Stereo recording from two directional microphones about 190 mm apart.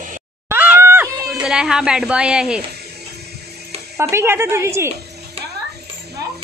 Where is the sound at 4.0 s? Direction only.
15° right (ahead or behind).